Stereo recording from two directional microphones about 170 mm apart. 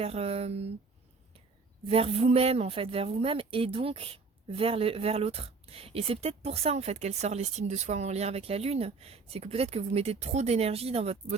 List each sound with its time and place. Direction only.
0.0 s a woman's voice: 35° right (ahead or behind)
1.9 s a woman's voice: 35° right (ahead or behind)